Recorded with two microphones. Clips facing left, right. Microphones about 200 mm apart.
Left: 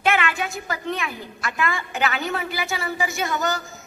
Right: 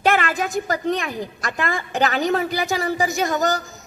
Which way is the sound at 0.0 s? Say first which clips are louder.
Right 3 dB; 35° right (ahead or behind).